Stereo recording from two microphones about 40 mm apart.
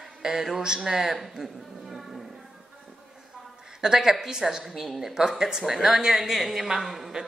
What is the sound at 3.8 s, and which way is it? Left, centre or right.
A woman's voice, centre.